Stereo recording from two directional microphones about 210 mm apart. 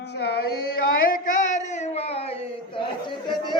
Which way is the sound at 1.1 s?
40° left (ahead or behind).